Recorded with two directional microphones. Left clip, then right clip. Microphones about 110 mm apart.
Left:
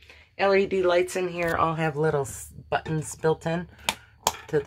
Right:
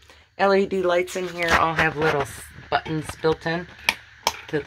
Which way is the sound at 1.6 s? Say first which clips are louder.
Right 3 dB; 40° left (ahead or behind).